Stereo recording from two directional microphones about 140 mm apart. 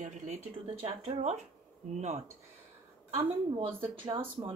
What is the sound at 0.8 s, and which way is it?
Speech, 45° right (ahead or behind).